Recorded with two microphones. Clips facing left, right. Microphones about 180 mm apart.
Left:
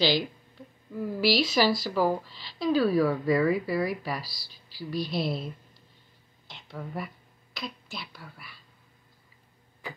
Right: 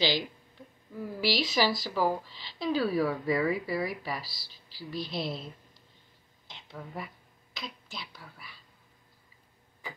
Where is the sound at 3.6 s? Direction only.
20° right (ahead or behind).